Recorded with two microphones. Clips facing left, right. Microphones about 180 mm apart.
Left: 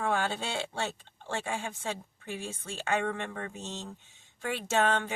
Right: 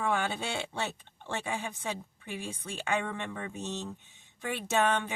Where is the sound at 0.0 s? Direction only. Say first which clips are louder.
Even; 15° right (ahead or behind).